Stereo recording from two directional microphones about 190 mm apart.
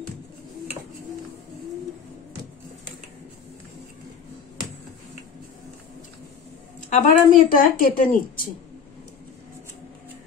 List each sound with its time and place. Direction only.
6.9 s speech: 45° left (ahead or behind)